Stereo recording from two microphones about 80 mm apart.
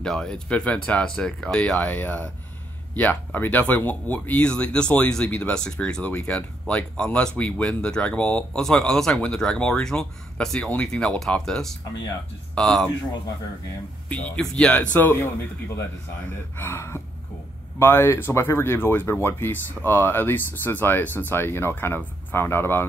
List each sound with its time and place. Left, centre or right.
0.0 s speech: centre
14.0 s speech: centre
15.0 s speech: left
16.5 s speech: left